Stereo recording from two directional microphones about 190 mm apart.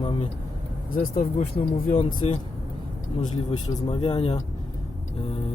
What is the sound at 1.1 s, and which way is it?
Speech, 45° left (ahead or behind).